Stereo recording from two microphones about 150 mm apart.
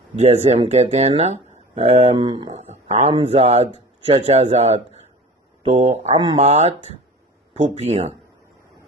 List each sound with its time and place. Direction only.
0.2 s speech: 45° right (ahead or behind)